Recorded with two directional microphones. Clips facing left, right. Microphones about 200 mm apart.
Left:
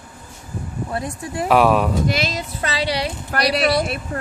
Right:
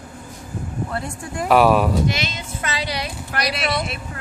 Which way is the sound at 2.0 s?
35° left (ahead or behind).